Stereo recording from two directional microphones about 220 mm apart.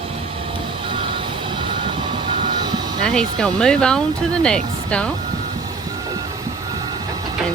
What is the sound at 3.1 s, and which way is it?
Speech, 5° left (ahead or behind).